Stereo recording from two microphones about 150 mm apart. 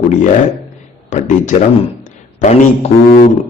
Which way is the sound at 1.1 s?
55° left (ahead or behind).